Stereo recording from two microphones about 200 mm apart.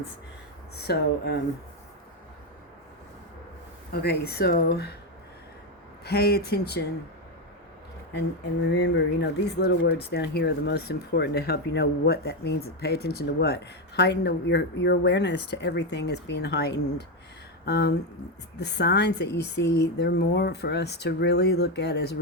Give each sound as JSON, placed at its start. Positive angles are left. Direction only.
{"t": 0.8, "sound": "speech", "side_deg": 55}
{"t": 4.0, "sound": "speech", "side_deg": 50}
{"t": 6.1, "sound": "speech", "side_deg": 55}
{"t": 8.6, "sound": "speech", "side_deg": 55}